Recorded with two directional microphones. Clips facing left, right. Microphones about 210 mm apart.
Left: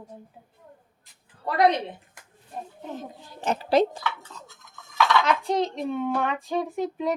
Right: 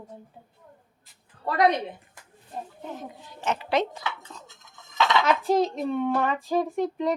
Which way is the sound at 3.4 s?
35° left (ahead or behind).